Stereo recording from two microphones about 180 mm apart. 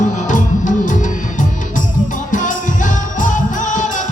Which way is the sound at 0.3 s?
45° left (ahead or behind).